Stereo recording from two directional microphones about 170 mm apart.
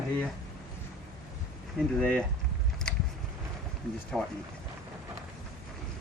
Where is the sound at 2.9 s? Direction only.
5° left (ahead or behind).